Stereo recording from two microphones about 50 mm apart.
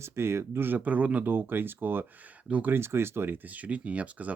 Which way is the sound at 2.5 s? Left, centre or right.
Right.